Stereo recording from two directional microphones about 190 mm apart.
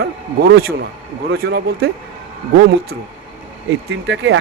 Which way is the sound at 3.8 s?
80° right.